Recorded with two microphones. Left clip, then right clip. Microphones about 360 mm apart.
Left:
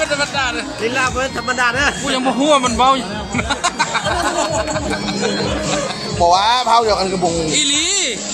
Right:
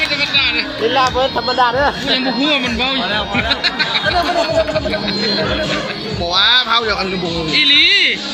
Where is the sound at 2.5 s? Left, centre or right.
Centre.